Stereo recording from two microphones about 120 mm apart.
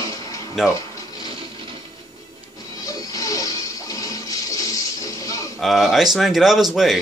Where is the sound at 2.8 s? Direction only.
30° left (ahead or behind).